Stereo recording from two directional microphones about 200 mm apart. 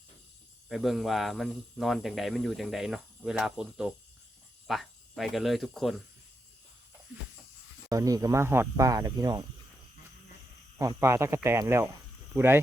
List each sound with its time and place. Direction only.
0.7 s speech: centre (ahead or behind)
7.9 s speech: 15° right (ahead or behind)
10.8 s speech: 15° right (ahead or behind)